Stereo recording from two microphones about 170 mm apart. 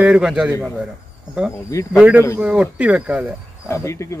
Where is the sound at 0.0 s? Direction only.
5° right (ahead or behind).